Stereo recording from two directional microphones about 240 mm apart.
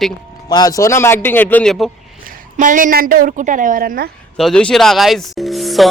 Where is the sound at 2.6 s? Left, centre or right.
Right.